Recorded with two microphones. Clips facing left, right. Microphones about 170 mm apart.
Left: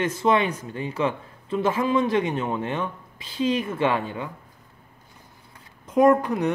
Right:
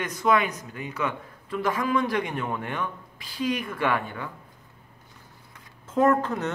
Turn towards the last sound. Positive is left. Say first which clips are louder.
# left 4 dB
turn(degrees=15)  # may be behind; listen again after turning